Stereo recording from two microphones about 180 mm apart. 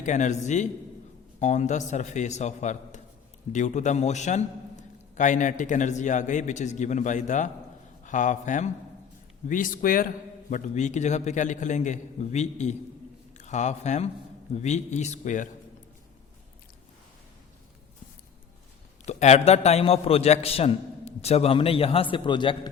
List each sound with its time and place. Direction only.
0.0 s a man's voice: 45° left (ahead or behind)
19.0 s a man's voice: 40° left (ahead or behind)